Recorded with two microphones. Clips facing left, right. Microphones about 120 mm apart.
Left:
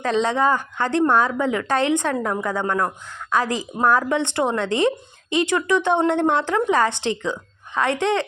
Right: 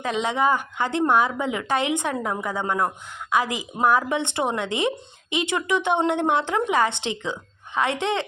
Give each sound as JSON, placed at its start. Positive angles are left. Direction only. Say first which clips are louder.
{"t": 0.0, "sound": "a woman's voice", "louder": "left 3 dB", "side_deg": -15}